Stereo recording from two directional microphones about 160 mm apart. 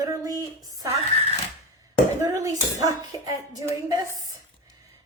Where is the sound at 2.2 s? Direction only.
20° right (ahead or behind).